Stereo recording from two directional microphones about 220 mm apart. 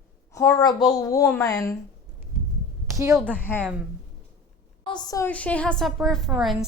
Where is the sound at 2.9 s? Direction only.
15° right (ahead or behind).